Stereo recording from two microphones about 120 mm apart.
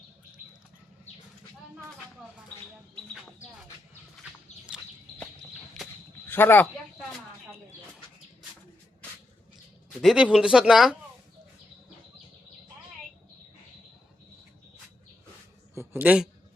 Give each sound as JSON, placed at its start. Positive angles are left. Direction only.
{"t": 6.2, "sound": "speech", "side_deg": 15}
{"t": 10.0, "sound": "speech", "side_deg": -5}
{"t": 15.7, "sound": "a sound", "side_deg": -20}